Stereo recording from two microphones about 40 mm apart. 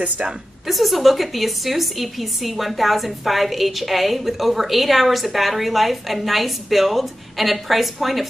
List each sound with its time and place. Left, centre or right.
0.2 s a woman's voice: right
0.7 s a woman's voice: centre